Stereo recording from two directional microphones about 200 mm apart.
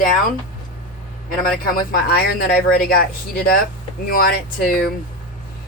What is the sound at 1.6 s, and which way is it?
Speech, 45° left (ahead or behind).